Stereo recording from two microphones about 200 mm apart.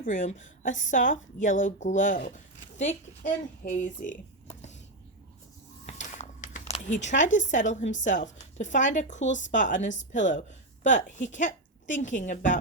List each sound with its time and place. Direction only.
0.0 s a woman's voice: 40° left (ahead or behind)
5.8 s a sound: 35° left (ahead or behind)
6.7 s a woman's voice: 35° left (ahead or behind)